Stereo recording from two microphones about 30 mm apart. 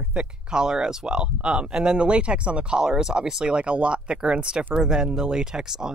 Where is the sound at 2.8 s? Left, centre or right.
Right.